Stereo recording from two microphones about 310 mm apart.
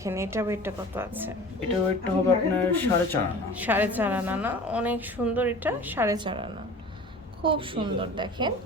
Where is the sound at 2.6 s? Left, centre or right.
Centre.